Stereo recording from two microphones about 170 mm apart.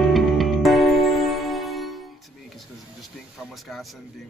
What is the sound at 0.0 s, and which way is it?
Music, centre (ahead or behind).